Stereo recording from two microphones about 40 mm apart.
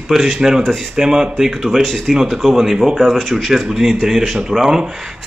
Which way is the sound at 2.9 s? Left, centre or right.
Centre.